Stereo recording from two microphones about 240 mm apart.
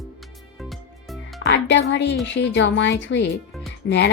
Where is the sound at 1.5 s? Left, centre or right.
Left.